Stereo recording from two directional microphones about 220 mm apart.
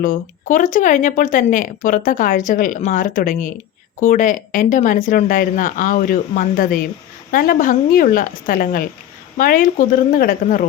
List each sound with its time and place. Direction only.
0.0 s speech: 35° left (ahead or behind)